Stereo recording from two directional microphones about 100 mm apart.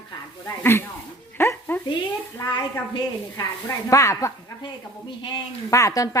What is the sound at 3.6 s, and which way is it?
Speech, 30° left (ahead or behind).